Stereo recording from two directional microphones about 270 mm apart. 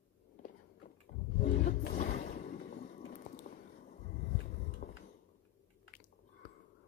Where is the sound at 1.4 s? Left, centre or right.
Left.